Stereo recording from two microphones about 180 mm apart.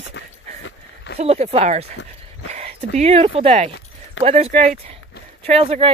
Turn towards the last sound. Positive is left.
turn(degrees=-30)  # may be behind; listen again after turning